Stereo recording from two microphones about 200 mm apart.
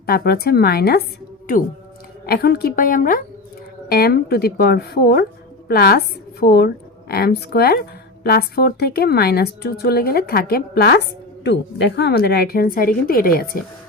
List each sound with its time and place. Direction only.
0.0 s a woman's voice: 50° left (ahead or behind)